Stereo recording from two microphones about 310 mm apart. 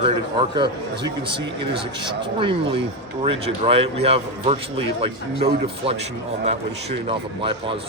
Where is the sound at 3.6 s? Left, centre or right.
Centre.